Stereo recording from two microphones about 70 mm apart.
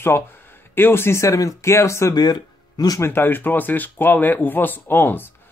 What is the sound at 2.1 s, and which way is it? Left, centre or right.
Speech, left.